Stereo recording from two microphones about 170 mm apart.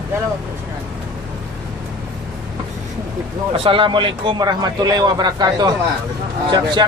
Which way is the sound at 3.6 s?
30° right (ahead or behind).